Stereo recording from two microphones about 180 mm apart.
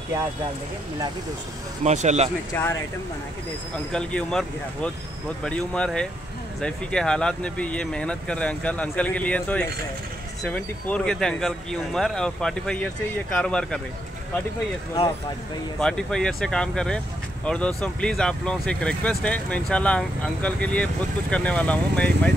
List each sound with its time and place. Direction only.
1.8 s speech: 40° right (ahead or behind)
2.5 s speech: 10° left (ahead or behind)
3.9 s speech: 5° left (ahead or behind)
15.8 s speech: 5° left (ahead or behind)